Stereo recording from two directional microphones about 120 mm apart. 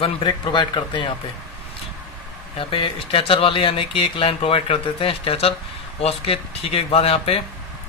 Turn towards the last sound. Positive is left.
turn(degrees=55)  # may be behind; listen again after turning